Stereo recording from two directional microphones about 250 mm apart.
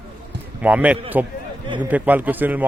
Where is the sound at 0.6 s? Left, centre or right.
Centre.